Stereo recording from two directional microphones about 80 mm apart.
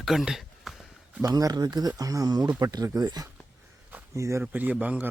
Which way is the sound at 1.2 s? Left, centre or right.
Right.